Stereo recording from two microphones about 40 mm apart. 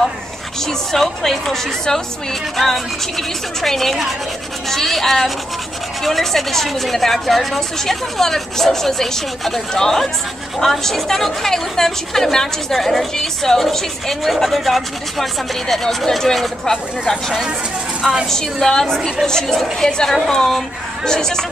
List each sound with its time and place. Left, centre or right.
0.6 s a woman's voice: centre